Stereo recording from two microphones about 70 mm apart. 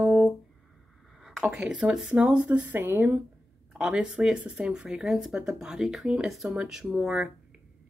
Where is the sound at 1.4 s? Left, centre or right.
Centre; by 3.2 s right.